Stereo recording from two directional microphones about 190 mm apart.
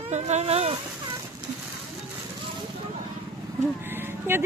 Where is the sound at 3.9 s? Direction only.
10° right (ahead or behind).